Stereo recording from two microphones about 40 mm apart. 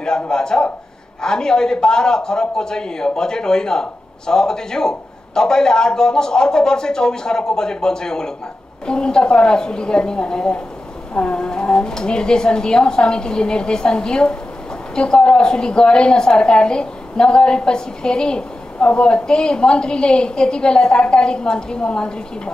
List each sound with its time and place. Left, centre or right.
0.0 s a woman's voice: centre